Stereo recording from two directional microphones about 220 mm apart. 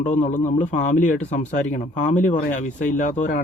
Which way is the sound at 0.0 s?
35° left (ahead or behind).